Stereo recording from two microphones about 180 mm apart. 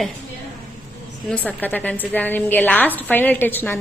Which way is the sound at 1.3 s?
10° left (ahead or behind).